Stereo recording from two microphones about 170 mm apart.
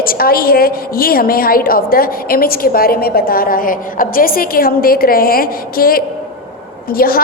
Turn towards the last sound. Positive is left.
turn(degrees=60)  # may be behind; listen again after turning